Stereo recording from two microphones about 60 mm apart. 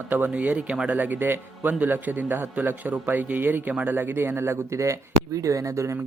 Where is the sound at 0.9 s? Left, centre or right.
Right.